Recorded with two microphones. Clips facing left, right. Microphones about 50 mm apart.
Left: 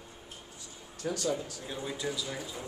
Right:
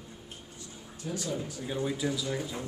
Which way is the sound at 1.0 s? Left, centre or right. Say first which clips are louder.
Left 3 dB; left.